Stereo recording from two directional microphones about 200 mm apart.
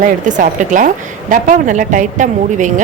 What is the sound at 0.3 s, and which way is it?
A woman's voice, 40° right (ahead or behind).